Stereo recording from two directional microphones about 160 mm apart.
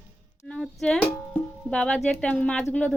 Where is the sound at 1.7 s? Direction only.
5° left (ahead or behind).